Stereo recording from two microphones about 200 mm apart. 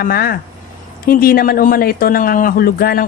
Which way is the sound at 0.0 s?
50° left (ahead or behind).